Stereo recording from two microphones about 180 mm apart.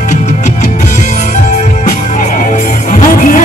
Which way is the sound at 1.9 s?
45° left (ahead or behind).